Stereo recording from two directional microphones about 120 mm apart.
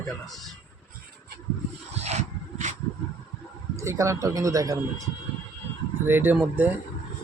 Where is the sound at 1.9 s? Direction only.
65° right (ahead or behind).